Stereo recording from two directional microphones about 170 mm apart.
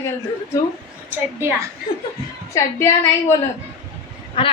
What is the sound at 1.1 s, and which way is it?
Speech, 15° right (ahead or behind).